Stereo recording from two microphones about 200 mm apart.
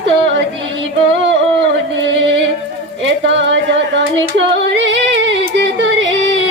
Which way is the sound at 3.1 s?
65° right (ahead or behind).